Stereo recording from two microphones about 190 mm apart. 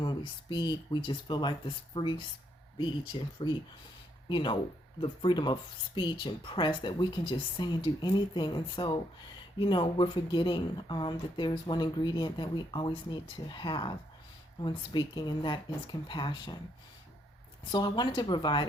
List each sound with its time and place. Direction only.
0.0 s speech: 25° left (ahead or behind)
17.7 s speech: 25° left (ahead or behind)